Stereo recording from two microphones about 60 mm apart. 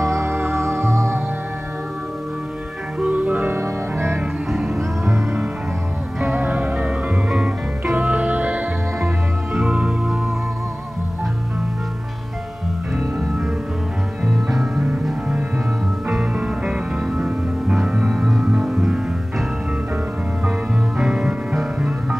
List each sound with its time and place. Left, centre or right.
0.0 s music: right
3.0 s music: right
3.5 s music: right
4.5 s music: centre
5.0 s music: right
6.2 s music: right
7.2 s music: centre
7.9 s music: right
9.0 s music: centre
14.2 s music: centre
15.2 s music: centre
21.0 s music: centre